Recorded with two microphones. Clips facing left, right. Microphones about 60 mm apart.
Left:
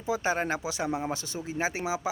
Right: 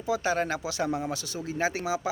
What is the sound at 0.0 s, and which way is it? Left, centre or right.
Speech, left.